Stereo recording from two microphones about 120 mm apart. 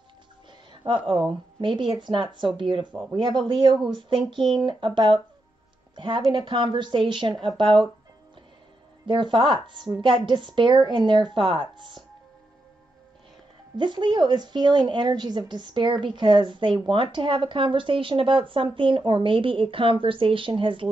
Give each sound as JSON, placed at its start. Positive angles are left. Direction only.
{"t": 0.8, "sound": "a woman's voice", "side_deg": -45}
{"t": 9.0, "sound": "speech", "side_deg": -40}
{"t": 13.7, "sound": "speech", "side_deg": -40}